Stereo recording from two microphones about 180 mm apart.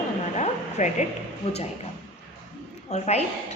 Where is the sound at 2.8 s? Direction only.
40° left (ahead or behind).